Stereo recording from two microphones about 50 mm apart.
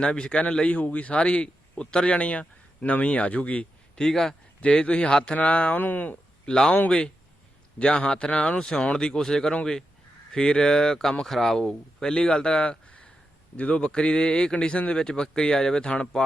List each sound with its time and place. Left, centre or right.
0.0 s a man's voice: centre
3.9 s a man's voice: centre
4.6 s a man's voice: left
5.7 s speech: left
6.4 s speech: centre
7.8 s a man's voice: centre